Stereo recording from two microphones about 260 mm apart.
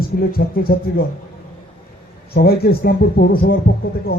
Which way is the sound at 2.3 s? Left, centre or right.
Left.